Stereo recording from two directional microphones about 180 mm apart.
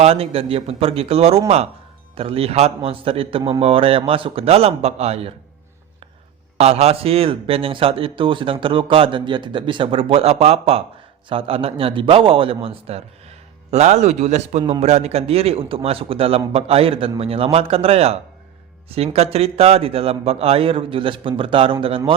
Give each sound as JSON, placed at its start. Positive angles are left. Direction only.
{"t": 0.0, "sound": "speech", "side_deg": -35}
{"t": 6.6, "sound": "speech", "side_deg": -35}